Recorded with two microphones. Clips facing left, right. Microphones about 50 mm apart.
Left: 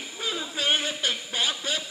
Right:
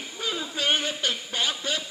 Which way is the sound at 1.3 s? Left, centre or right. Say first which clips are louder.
Even; centre.